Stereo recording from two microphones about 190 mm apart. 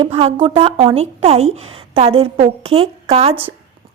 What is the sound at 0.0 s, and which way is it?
A woman's voice, 30° right (ahead or behind).